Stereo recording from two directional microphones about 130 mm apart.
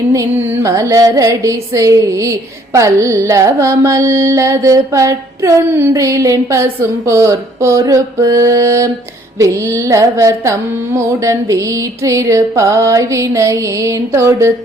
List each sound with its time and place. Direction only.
0.1 s carnatic music: 25° right (ahead or behind)